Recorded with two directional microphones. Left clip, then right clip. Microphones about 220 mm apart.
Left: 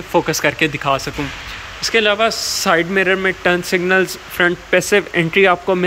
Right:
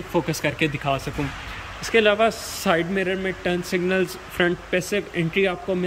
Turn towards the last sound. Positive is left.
turn(degrees=-5)  # may be behind; listen again after turning